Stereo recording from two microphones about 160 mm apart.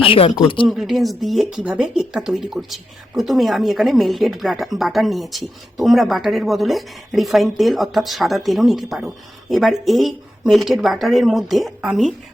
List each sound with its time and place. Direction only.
0.0 s speech: 35° left (ahead or behind)
0.7 s speech: centre (ahead or behind)